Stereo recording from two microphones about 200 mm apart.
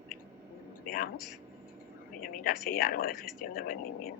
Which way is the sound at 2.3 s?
45° left (ahead or behind).